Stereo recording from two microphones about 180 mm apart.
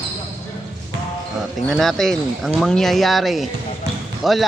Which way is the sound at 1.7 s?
Centre (ahead or behind).